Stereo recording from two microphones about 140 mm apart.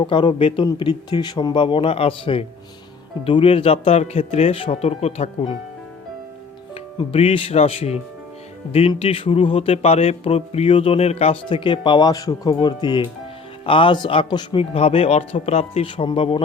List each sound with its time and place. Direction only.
0.0 s speech: 35° left (ahead or behind)
7.1 s speech: 45° left (ahead or behind)